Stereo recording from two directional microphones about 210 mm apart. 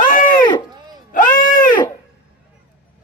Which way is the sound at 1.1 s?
40° left (ahead or behind).